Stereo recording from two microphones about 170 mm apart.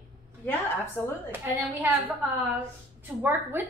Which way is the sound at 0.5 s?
10° left (ahead or behind).